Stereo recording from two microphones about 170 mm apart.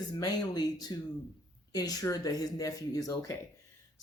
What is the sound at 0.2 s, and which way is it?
Speech, 25° left (ahead or behind).